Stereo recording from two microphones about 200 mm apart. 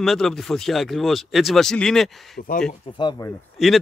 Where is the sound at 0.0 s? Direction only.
Centre (ahead or behind).